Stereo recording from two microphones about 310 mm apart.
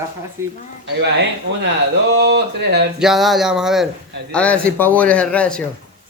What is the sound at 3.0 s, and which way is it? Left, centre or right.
A man's voice, centre.